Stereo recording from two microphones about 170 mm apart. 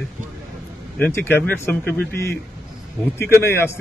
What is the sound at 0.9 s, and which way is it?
A man's voice, 10° left (ahead or behind).